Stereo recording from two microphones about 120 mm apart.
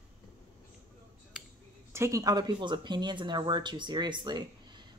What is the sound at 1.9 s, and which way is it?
Speech, 25° right (ahead or behind).